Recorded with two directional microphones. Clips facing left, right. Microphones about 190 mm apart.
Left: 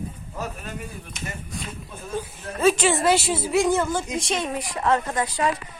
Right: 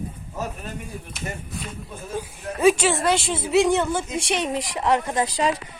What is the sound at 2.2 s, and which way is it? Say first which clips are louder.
Speech: right 2 dB; 10° right (ahead or behind).